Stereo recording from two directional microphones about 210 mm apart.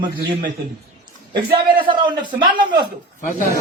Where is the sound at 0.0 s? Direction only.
20° right (ahead or behind).